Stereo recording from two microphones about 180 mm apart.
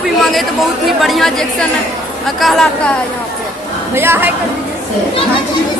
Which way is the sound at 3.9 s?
10° right (ahead or behind).